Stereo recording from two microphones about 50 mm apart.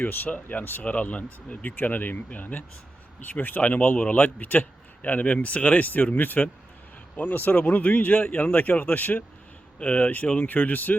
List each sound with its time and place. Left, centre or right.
0.0 s speech: left